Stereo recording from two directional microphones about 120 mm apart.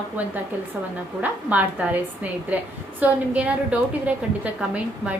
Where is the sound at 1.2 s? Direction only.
15° right (ahead or behind).